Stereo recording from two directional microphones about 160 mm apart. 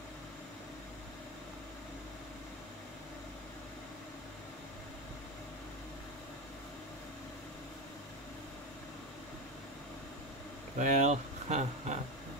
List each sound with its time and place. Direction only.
10.8 s speech: 50° right (ahead or behind)